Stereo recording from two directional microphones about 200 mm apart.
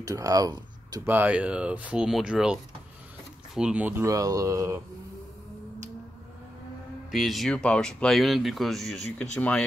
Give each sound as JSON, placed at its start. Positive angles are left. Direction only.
{"t": 0.0, "sound": "speech", "side_deg": -15}
{"t": 7.1, "sound": "speech", "side_deg": 0}